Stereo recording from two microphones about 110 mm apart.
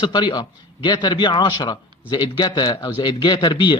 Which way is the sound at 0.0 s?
45° left (ahead or behind).